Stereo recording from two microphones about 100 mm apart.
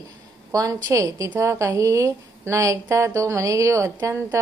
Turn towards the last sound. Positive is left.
turn(degrees=-30)  # may be behind; listen again after turning